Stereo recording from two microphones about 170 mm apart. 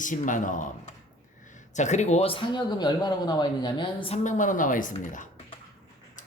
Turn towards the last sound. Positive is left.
turn(degrees=50)  # may be behind; listen again after turning